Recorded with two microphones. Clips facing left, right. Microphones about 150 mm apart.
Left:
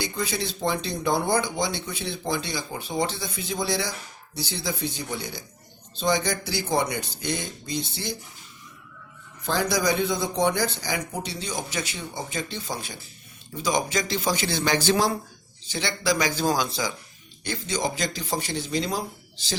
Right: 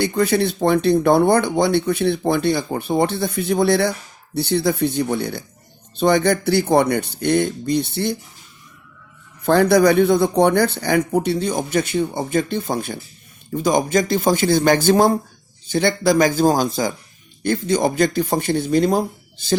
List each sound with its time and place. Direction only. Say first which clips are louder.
0.0 s speech: right 11 dB; 60° right (ahead or behind)
9.5 s speech: right 11 dB; 60° right (ahead or behind)